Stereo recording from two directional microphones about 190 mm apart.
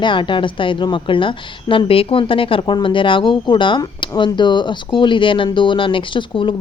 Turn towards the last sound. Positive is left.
turn(degrees=25)  # may be behind; listen again after turning